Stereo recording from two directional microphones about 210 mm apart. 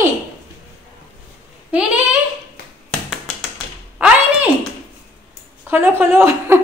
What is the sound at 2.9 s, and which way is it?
Tap, centre (ahead or behind).